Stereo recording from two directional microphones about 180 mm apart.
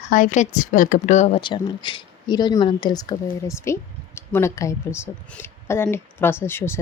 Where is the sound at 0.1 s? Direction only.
45° left (ahead or behind).